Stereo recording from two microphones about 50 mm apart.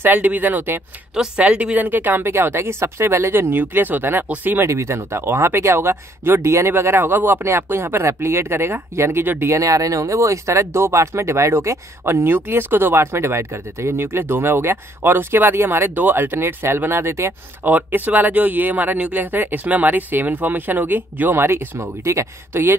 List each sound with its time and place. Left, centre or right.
0.0 s speech: right
1.1 s speech: centre
1.4 s speech: right
1.9 s speech: right
4.6 s speech: right
6.4 s speech: right
6.8 s speech: right
9.2 s speech: right
9.5 s speech: right
12.0 s speech: right
17.6 s speech: right
22.5 s speech: right